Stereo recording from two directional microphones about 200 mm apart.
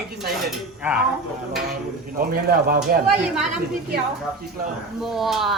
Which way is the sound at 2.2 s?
50° right (ahead or behind).